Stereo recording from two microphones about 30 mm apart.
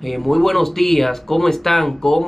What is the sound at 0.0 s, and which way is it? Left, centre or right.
Speech, centre.